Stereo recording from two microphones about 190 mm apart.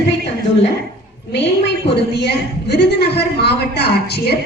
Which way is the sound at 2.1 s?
60° left (ahead or behind).